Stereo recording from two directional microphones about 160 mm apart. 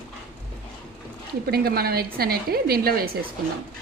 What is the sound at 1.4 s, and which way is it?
A woman's voice, 75° right (ahead or behind).